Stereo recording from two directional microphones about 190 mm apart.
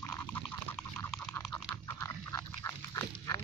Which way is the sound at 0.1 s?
10° left (ahead or behind).